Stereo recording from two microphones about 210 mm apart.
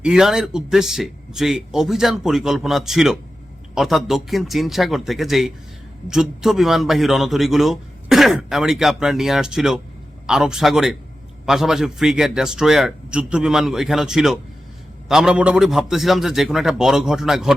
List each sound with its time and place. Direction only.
0.0 s a man's voice: 5° right (ahead or behind)